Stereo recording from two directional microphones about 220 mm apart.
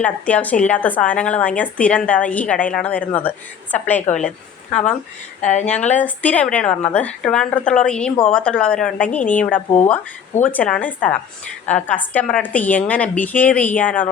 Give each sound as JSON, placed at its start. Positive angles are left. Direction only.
{"t": 0.0, "sound": "a woman's voice", "side_deg": 5}
{"t": 5.4, "sound": "speech", "side_deg": 30}
{"t": 5.9, "sound": "a woman's voice", "side_deg": 5}